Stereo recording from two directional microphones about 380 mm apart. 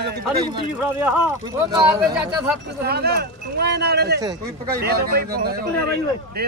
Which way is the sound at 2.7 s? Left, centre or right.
Right.